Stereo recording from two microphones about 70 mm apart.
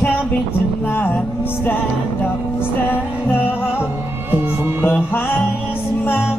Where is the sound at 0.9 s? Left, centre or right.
Left.